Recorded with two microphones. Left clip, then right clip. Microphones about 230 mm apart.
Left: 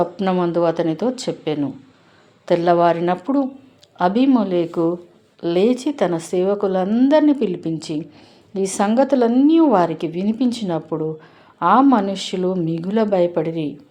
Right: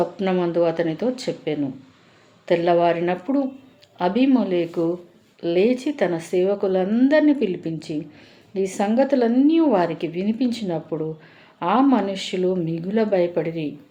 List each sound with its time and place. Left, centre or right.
0.0 s a woman's voice: left